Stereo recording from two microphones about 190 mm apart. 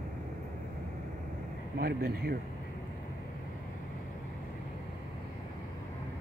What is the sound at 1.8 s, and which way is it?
Speech, 55° right (ahead or behind).